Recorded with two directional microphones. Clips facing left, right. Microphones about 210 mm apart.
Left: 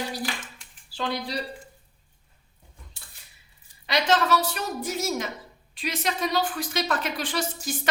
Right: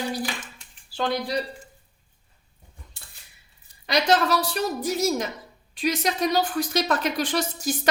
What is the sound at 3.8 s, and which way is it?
A woman's voice, 40° right (ahead or behind).